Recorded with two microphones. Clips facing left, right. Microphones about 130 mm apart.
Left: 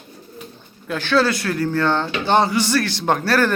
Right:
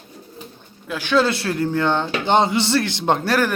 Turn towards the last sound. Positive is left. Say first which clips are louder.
# left 1 dB
turn(degrees=-15)  # may be behind; listen again after turning